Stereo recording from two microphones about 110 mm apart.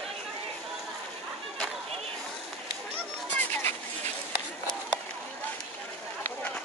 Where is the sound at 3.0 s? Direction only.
15° left (ahead or behind).